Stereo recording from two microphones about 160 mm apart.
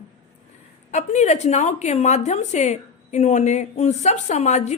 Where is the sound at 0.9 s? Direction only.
45° left (ahead or behind).